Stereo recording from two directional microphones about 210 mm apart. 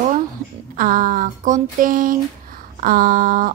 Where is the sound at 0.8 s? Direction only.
40° right (ahead or behind).